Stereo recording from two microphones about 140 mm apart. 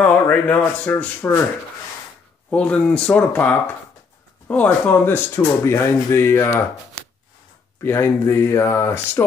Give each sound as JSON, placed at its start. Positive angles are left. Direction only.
{"t": 0.0, "sound": "speech", "side_deg": 10}
{"t": 2.5, "sound": "speech", "side_deg": 10}
{"t": 7.8, "sound": "speech", "side_deg": 15}